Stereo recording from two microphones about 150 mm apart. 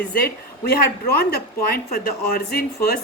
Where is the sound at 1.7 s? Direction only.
90° left.